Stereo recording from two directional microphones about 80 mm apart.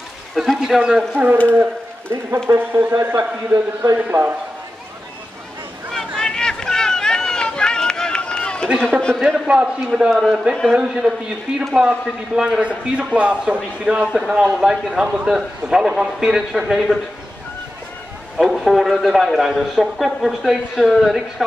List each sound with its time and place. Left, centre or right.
0.3 s speech: centre
0.6 s a man's voice: centre
1.5 s a man's voice: right
5.9 s run: centre
9.1 s a man's voice: centre
18.4 s a man's voice: centre